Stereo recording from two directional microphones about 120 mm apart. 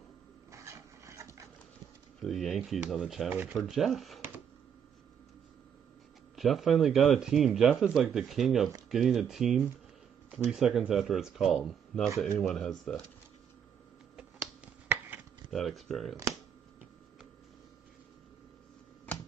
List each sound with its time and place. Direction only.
0.5 s rub: 25° right (ahead or behind)
2.1 s speech: centre (ahead or behind)
3.3 s speech: 15° right (ahead or behind)
3.5 s speech: centre (ahead or behind)
6.3 s speech: centre (ahead or behind)
14.4 s finger snapping: 15° right (ahead or behind)
15.5 s speech: centre (ahead or behind)